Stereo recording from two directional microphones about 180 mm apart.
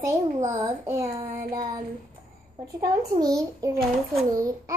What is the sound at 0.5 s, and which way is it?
Child singing, 15° right (ahead or behind).